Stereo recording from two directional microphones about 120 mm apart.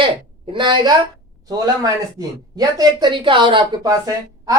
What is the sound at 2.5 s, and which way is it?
A woman's voice, 35° right (ahead or behind).